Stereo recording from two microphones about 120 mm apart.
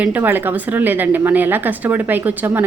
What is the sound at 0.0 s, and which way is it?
A woman's voice, 15° right (ahead or behind).